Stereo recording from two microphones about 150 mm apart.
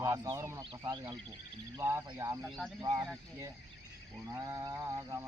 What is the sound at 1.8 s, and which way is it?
Speech, 15° right (ahead or behind).